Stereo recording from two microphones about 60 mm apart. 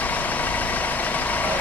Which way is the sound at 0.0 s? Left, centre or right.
Left.